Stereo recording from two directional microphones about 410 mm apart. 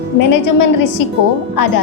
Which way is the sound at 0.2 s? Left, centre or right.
Left.